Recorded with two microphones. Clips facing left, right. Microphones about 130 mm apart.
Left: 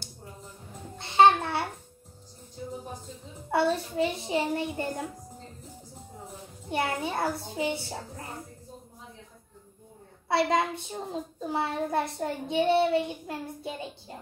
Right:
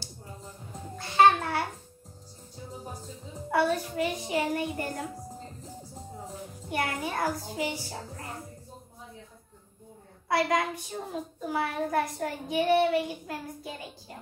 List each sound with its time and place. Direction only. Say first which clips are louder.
0.9 s babbling: left 1 dB; 25° left (ahead or behind)
3.5 s a child's voice: left 1 dB; 25° left (ahead or behind)
6.7 s a child's voice: left 2 dB; 25° left (ahead or behind)
10.2 s a child's voice: left 1 dB; 25° left (ahead or behind)